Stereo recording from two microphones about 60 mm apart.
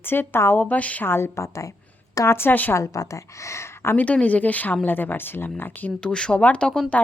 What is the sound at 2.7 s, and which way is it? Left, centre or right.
A woman's voice, left.